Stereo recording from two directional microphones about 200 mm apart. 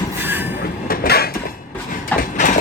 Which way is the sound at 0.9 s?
50° left (ahead or behind).